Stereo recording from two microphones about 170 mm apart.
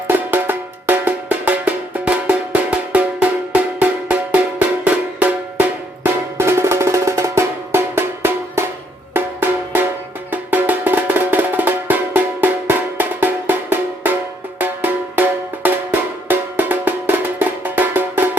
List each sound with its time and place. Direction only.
0.1 s percussion: 10° right (ahead or behind)
4.8 s music: 10° right (ahead or behind)